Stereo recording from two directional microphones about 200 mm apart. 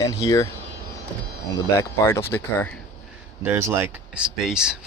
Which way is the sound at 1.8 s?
15° left (ahead or behind).